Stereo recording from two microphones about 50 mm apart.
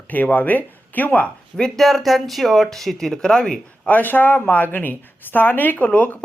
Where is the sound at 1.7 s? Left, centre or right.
Centre.